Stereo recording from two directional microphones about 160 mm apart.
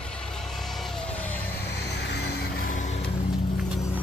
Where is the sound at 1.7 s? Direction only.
90° left; by 3.0 s 50° left (ahead or behind).